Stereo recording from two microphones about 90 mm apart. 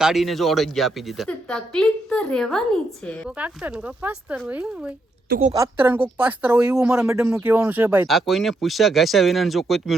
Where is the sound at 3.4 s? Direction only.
15° right (ahead or behind).